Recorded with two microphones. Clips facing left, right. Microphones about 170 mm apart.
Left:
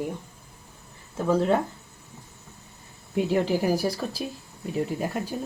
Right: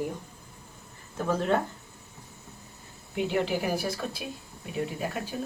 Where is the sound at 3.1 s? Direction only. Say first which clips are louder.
Left 4 dB; 35° left (ahead or behind).